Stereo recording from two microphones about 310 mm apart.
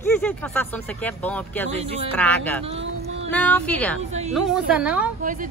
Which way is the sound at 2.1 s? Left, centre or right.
Centre.